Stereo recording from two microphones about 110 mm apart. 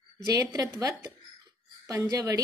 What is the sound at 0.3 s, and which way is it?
A woman's voice, 30° right (ahead or behind).